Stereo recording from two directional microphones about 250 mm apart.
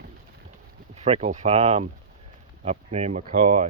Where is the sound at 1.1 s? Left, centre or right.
Right.